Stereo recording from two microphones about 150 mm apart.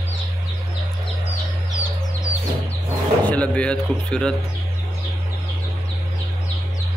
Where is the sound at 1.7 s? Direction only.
20° left (ahead or behind).